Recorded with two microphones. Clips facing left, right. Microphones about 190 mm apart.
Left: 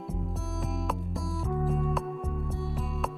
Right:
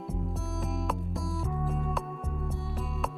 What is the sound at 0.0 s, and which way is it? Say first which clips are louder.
Music: even; centre (ahead or behind).